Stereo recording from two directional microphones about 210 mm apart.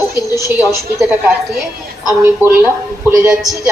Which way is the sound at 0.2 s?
15° left (ahead or behind).